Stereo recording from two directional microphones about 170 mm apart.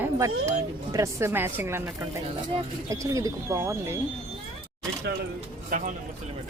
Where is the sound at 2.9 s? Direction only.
20° right (ahead or behind).